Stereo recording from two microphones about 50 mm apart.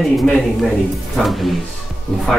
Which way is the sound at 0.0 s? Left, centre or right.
Centre.